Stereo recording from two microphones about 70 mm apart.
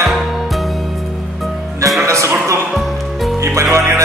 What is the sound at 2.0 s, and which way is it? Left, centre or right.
Music, right.